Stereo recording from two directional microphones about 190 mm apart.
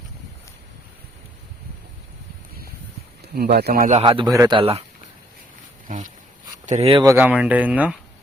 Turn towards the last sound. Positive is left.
turn(degrees=-5)  # may be behind; listen again after turning